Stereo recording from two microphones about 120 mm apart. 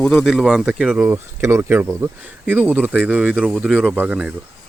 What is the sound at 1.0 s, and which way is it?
Speech, 20° right (ahead or behind).